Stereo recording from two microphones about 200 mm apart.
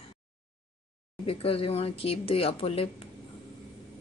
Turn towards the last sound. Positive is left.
turn(degrees=30)  # may be behind; listen again after turning